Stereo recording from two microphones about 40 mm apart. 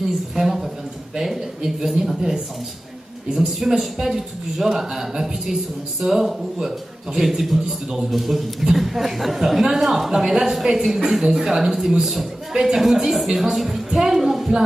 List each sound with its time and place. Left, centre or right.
0.4 s a sound: centre
1.1 s speech: centre
13.9 s music: centre